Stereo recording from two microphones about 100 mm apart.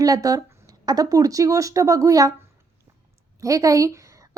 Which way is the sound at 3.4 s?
35° right (ahead or behind).